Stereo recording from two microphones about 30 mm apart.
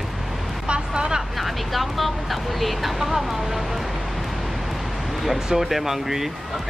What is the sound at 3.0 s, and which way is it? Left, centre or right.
Speech, centre.